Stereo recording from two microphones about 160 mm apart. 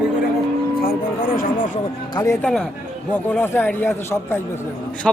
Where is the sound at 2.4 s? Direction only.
5° left (ahead or behind).